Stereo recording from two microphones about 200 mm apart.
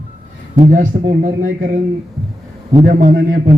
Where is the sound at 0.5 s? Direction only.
35° right (ahead or behind).